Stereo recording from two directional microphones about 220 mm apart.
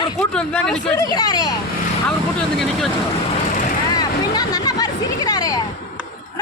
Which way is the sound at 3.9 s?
15° left (ahead or behind).